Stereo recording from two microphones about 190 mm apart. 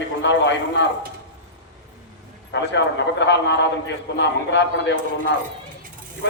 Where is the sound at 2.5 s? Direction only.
70° left (ahead or behind).